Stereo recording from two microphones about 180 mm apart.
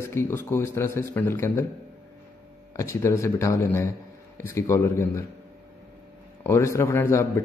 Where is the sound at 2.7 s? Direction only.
15° left (ahead or behind).